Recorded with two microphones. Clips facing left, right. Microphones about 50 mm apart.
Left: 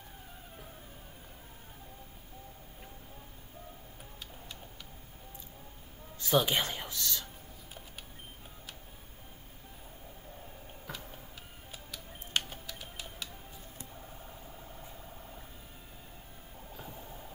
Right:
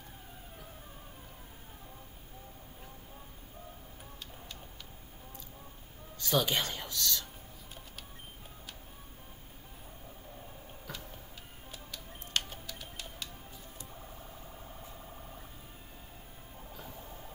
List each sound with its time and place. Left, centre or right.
6.1 s music: centre
11.7 s music: centre
16.7 s a sound: centre